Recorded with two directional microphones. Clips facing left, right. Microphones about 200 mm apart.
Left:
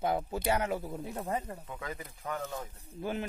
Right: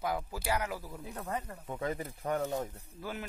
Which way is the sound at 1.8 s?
35° right (ahead or behind).